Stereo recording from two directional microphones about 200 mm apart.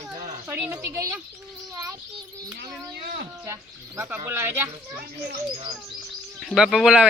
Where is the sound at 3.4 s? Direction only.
10° right (ahead or behind).